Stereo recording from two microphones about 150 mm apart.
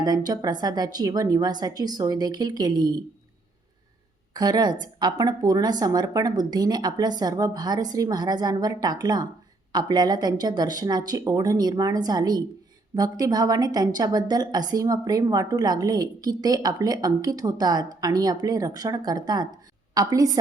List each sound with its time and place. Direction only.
0.0 s a woman's voice: 25° right (ahead or behind)
4.4 s a woman's voice: 25° right (ahead or behind)